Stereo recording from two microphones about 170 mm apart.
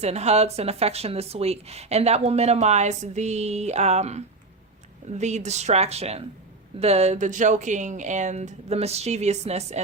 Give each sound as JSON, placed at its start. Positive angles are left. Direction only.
{"t": 0.0, "sound": "a woman's voice", "side_deg": -40}